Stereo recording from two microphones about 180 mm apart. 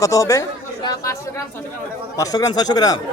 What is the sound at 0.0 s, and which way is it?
Speech, 20° left (ahead or behind).